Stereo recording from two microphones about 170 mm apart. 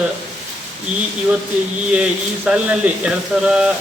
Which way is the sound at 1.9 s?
5° right (ahead or behind).